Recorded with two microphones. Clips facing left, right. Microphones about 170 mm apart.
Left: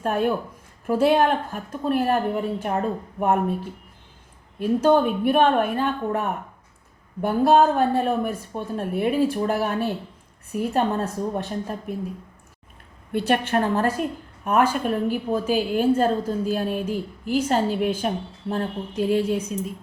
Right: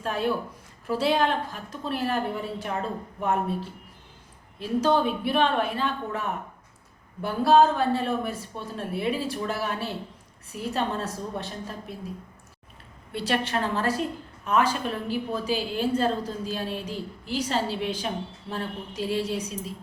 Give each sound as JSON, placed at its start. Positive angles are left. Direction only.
{"t": 0.0, "sound": "a woman's voice", "side_deg": 50}
{"t": 13.1, "sound": "a woman's voice", "side_deg": 50}